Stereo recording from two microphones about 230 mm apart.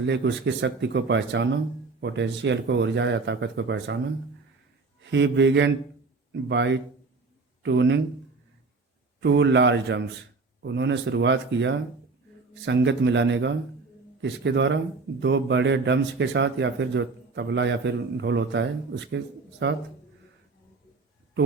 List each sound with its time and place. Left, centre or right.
0.0 s speech: right
5.1 s speech: right
9.2 s speech: right